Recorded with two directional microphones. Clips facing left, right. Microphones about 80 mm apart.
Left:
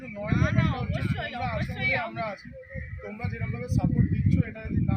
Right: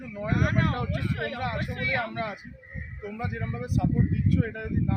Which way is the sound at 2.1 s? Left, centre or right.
Right.